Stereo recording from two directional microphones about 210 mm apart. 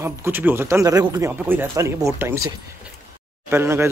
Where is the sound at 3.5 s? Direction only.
10° right (ahead or behind).